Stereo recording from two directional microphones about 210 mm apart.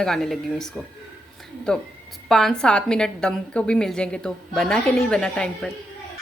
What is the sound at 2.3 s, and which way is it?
Speech, 5° left (ahead or behind).